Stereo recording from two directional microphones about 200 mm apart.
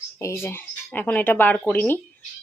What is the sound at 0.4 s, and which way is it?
A woman's voice, 10° left (ahead or behind).